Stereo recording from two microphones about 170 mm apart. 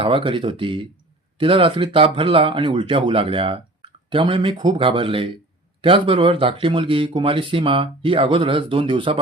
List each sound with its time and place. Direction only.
0.0 s speech: 30° right (ahead or behind)